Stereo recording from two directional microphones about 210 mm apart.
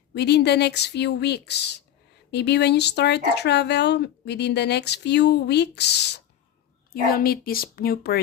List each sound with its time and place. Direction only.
0.1 s speech: 50° left (ahead or behind)